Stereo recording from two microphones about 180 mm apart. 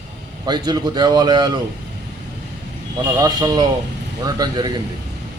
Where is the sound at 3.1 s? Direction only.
20° right (ahead or behind).